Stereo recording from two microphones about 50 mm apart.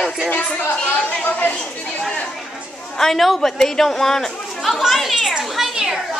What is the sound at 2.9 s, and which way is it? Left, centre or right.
A woman's voice, centre.